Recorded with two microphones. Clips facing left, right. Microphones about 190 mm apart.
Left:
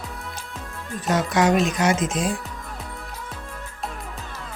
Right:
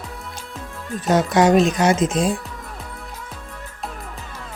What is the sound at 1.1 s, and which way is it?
Speech, 30° right (ahead or behind).